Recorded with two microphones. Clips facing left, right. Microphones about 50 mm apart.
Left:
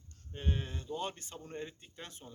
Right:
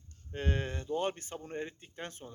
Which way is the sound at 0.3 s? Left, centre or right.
Right.